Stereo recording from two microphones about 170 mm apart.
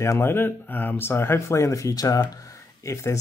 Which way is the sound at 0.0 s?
15° left (ahead or behind).